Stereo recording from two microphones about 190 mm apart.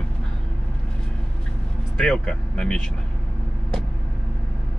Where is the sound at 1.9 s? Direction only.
Centre (ahead or behind).